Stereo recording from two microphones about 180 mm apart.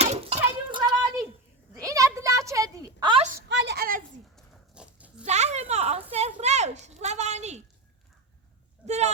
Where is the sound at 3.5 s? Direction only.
75° right (ahead or behind); by 4.0 s 55° right (ahead or behind).